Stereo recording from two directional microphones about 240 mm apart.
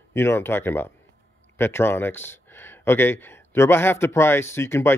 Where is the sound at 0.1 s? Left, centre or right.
Centre.